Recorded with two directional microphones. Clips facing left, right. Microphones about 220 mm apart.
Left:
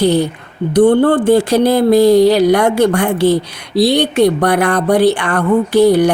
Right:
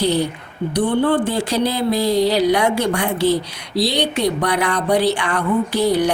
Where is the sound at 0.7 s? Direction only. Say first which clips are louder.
Left 8 dB; 50° left (ahead or behind).